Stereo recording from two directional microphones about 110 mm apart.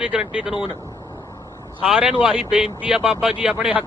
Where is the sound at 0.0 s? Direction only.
10° right (ahead or behind).